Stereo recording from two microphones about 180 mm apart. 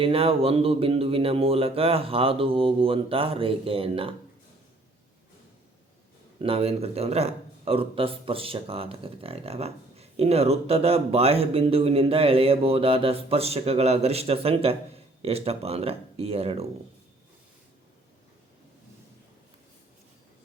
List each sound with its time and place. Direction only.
0.0 s a man's voice: 30° right (ahead or behind)
6.4 s a man's voice: 30° right (ahead or behind)